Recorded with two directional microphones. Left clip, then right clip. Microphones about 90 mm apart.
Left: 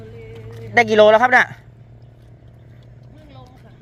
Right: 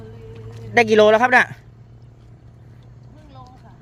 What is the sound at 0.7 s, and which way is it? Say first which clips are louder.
Speech: left 2 dB; 85° right.